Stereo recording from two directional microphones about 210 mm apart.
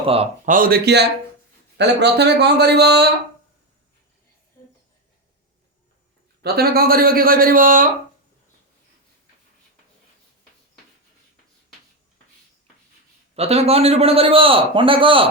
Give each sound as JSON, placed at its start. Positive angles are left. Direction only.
{"t": 0.0, "sound": "a man's voice", "side_deg": -30}
{"t": 0.5, "sound": "speech", "side_deg": -45}
{"t": 6.4, "sound": "speech", "side_deg": -45}
{"t": 13.3, "sound": "a man's voice", "side_deg": -30}